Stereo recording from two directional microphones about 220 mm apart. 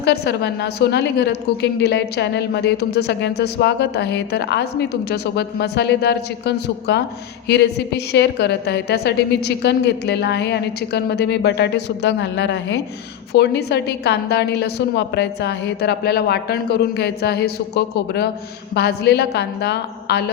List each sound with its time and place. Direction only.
0.0 s a woman's voice: 50° left (ahead or behind)